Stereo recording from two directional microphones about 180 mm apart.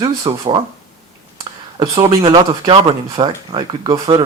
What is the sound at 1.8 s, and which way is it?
Speech, 25° right (ahead or behind).